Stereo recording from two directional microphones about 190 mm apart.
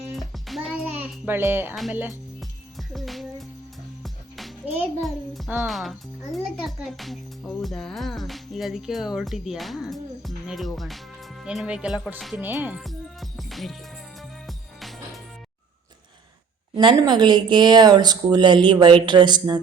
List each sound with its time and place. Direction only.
0.1 s music: centre (ahead or behind)
1.7 s a child's voice: centre (ahead or behind)
2.4 s music: centre (ahead or behind)
4.9 s a child's voice: centre (ahead or behind)
12.5 s music: 10° right (ahead or behind)
16.7 s speech: 20° right (ahead or behind)